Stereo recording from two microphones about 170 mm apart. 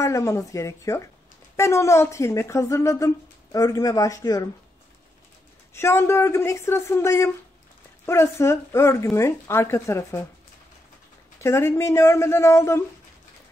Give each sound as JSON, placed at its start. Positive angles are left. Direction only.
{"t": 0.0, "sound": "speech", "side_deg": 15}
{"t": 5.8, "sound": "speech", "side_deg": 15}
{"t": 11.4, "sound": "speech", "side_deg": 15}